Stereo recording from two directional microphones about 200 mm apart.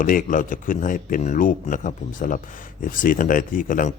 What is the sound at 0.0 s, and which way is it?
A man's voice, 40° left (ahead or behind).